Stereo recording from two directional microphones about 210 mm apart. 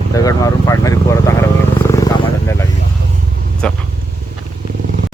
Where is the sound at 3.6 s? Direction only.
5° left (ahead or behind).